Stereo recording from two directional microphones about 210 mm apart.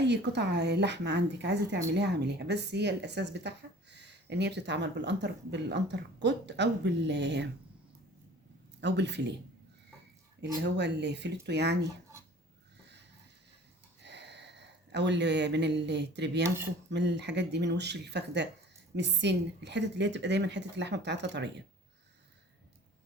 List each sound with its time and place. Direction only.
0.0 s speech: 55° right (ahead or behind)
8.8 s speech: 55° right (ahead or behind)
10.6 s speech: 55° right (ahead or behind)
14.0 s speech: 55° right (ahead or behind)